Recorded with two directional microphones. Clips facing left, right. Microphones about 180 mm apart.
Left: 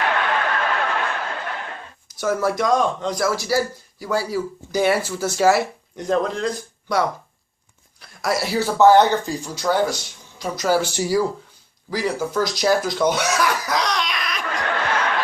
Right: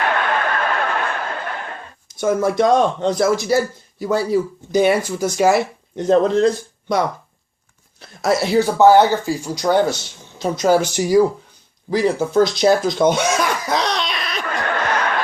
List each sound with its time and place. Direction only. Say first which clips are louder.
0.0 s snicker: right 2 dB; 50° right (ahead or behind)
2.0 s speech: right 3 dB; 20° right (ahead or behind)
8.0 s speech: right 5 dB; 25° right (ahead or behind)
14.4 s a sound: right 2 dB; 50° right (ahead or behind)